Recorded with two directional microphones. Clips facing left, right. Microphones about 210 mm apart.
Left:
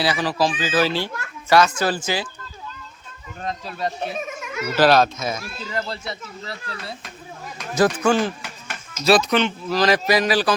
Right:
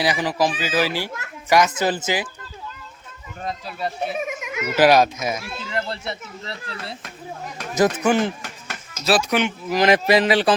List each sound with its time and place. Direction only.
0.0 s a child's voice: 20° right (ahead or behind)
3.4 s speech: 5° right (ahead or behind)
5.5 s a child's voice: 25° right (ahead or behind)
9.0 s a child's voice: 10° right (ahead or behind); by 10.5 s 25° right (ahead or behind)